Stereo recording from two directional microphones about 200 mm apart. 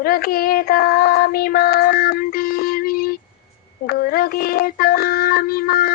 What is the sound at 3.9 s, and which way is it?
Child singing, 50° left (ahead or behind).